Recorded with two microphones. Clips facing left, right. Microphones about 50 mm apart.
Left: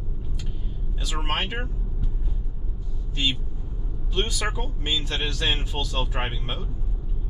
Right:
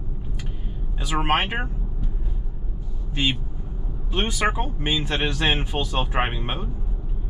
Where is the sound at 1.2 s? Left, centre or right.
Right.